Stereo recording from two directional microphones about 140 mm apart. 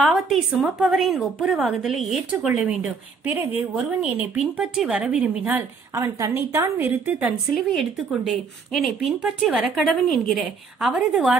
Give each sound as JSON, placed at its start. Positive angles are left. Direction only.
{"t": 0.1, "sound": "a woman's voice", "side_deg": 0}
{"t": 5.5, "sound": "a woman's voice", "side_deg": -20}
{"t": 7.5, "sound": "a woman's voice", "side_deg": 0}